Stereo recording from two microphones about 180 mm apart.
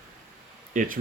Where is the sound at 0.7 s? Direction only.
45° right (ahead or behind).